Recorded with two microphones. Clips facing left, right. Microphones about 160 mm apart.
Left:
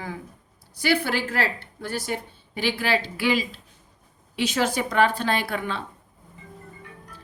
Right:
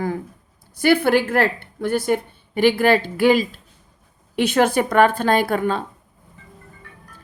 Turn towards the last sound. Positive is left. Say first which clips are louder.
# right 8 dB
turn(degrees=-45)  # may be behind; listen again after turning